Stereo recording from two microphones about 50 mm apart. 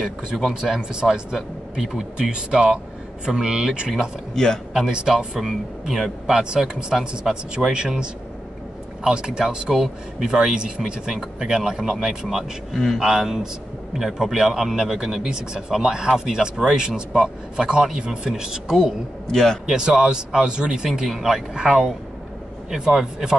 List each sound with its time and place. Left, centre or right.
0.5 s a man's voice: centre
12.7 s speech: centre
13.0 s a man's voice: centre
19.3 s a man's voice: centre
19.6 s a man's voice: centre